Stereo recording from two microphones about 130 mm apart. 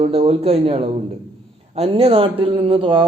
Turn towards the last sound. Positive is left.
turn(degrees=-40)  # may be behind; listen again after turning